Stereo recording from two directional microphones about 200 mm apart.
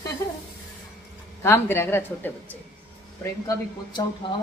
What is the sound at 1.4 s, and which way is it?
A man's voice, 10° left (ahead or behind).